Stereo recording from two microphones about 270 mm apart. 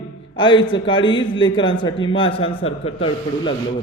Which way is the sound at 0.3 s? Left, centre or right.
Centre.